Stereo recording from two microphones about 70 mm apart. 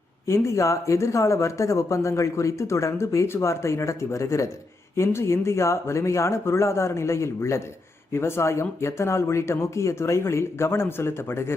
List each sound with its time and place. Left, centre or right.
0.3 s speech: left